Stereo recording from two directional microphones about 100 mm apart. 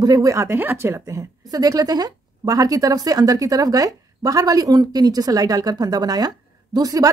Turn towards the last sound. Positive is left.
turn(degrees=-35)  # may be behind; listen again after turning